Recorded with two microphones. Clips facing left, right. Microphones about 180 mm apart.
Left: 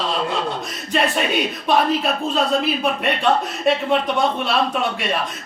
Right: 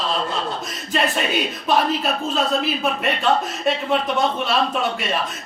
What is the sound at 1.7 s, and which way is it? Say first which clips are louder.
A man's voice: left 2 dB; centre (ahead or behind).